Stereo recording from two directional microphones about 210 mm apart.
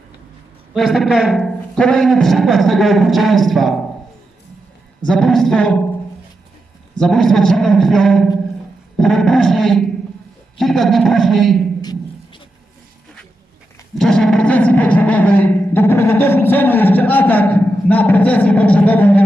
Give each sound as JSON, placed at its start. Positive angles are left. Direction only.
{"t": 0.7, "sound": "a man's voice", "side_deg": 0}
{"t": 5.0, "sound": "a man's voice", "side_deg": 0}
{"t": 6.9, "sound": "a man's voice", "side_deg": 5}
{"t": 11.8, "sound": "a sound", "side_deg": 20}
{"t": 14.0, "sound": "speech", "side_deg": 0}